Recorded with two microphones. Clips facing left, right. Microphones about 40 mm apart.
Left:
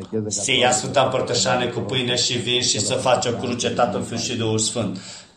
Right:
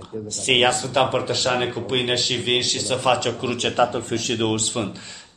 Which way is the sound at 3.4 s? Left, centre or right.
Right.